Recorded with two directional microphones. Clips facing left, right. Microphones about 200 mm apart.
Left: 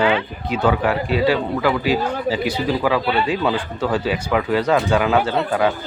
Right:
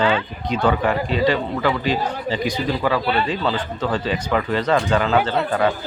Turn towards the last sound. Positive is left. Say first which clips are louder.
# left 1 dB
turn(degrees=5)  # may be behind; listen again after turning